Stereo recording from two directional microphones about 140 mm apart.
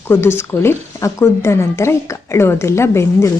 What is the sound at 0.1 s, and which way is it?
Speech, 20° left (ahead or behind).